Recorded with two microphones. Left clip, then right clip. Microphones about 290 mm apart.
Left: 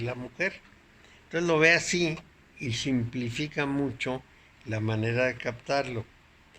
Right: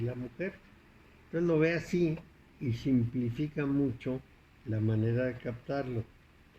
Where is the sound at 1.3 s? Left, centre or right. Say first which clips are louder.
Left 4 dB; left.